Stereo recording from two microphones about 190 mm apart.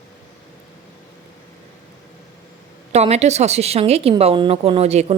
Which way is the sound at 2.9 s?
35° right (ahead or behind).